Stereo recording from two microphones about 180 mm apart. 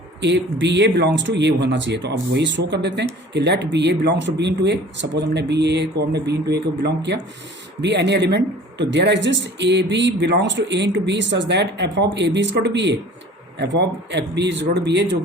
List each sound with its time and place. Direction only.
0.2 s speech: 80° right